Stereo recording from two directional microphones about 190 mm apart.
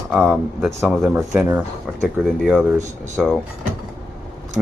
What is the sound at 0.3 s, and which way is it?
Speech, 10° right (ahead or behind).